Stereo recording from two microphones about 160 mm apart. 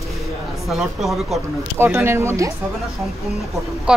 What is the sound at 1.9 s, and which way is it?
Speech, 10° right (ahead or behind).